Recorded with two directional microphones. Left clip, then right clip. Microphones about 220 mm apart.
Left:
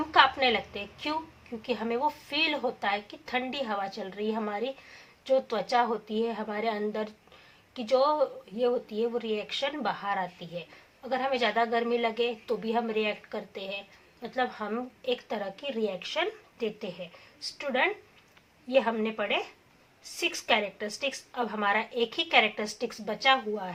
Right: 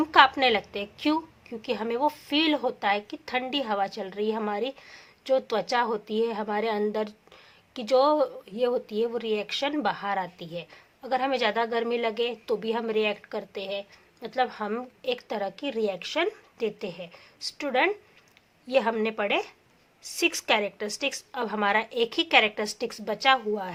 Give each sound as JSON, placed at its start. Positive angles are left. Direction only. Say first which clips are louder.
{"t": 0.1, "sound": "a woman's voice", "louder": "right 3 dB", "side_deg": -45}